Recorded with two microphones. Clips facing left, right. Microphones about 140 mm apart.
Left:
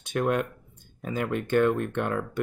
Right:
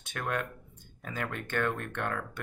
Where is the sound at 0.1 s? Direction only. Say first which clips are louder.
Left 8 dB; 20° left (ahead or behind).